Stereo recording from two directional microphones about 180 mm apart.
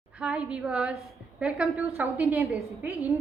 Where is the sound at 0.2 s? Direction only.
5° right (ahead or behind).